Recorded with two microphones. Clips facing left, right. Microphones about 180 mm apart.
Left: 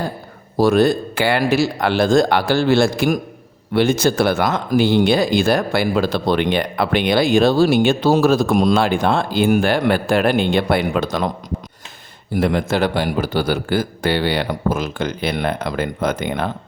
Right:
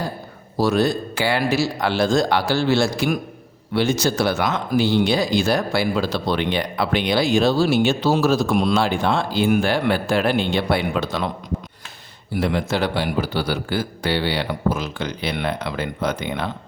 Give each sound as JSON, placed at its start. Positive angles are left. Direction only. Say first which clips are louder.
{"t": 0.5, "sound": "speech", "louder": "left 5 dB", "side_deg": 55}
{"t": 12.3, "sound": "speech", "louder": "left 4 dB", "side_deg": 50}